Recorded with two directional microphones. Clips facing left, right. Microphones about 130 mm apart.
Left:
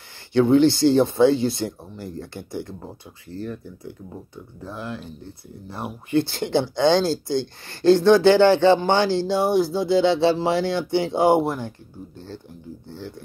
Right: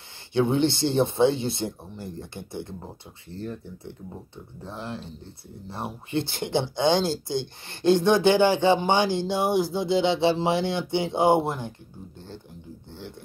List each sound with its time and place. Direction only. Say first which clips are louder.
0.3 s speech: left 6 dB; 20° right (ahead or behind)